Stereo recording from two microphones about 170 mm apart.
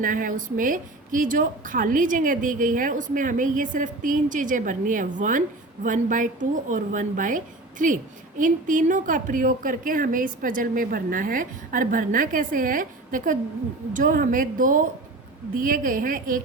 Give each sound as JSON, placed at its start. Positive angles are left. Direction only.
{"t": 0.0, "sound": "a woman's voice", "side_deg": -55}